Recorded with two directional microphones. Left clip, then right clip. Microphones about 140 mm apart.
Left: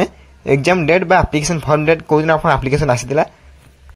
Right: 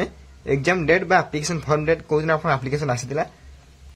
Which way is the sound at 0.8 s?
35° left (ahead or behind).